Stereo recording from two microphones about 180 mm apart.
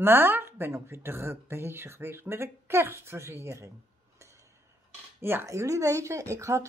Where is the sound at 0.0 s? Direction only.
10° right (ahead or behind).